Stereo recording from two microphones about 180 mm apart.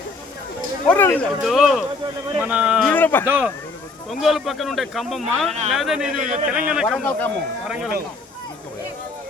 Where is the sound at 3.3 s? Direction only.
10° right (ahead or behind).